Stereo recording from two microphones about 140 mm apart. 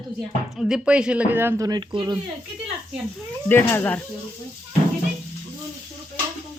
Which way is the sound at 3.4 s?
15° left (ahead or behind).